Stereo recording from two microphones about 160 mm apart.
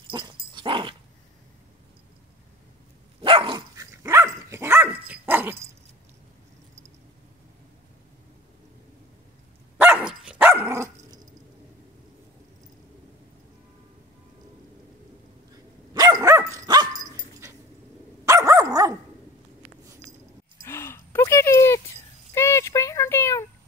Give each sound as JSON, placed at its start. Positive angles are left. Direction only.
{"t": 0.1, "sound": "dog", "side_deg": -30}
{"t": 3.2, "sound": "dog", "side_deg": -35}
{"t": 9.8, "sound": "dog", "side_deg": -10}
{"t": 15.9, "sound": "dog", "side_deg": -25}
{"t": 20.6, "sound": "a sound", "side_deg": 15}